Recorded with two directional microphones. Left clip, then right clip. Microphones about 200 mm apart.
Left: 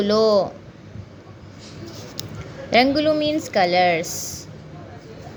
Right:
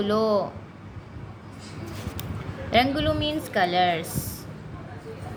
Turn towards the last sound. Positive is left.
turn(degrees=30)  # may be behind; listen again after turning